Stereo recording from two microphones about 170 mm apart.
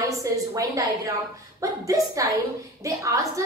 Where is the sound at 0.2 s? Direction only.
20° right (ahead or behind).